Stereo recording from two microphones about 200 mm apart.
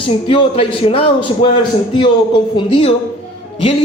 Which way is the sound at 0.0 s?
25° left (ahead or behind).